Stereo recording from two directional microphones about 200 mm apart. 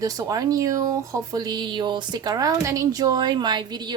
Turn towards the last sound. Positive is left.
turn(degrees=-20)  # may be behind; listen again after turning